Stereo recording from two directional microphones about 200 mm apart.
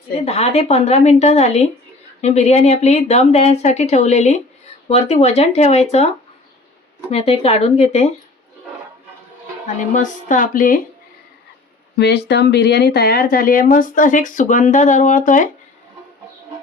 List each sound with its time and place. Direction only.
0.3 s speech: 30° left (ahead or behind)
7.1 s speech: 30° left (ahead or behind)
9.9 s speech: 40° left (ahead or behind)
11.9 s speech: 55° left (ahead or behind); by 15.4 s 40° left (ahead or behind)